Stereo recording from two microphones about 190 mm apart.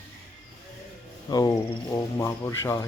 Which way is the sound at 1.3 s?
20° left (ahead or behind).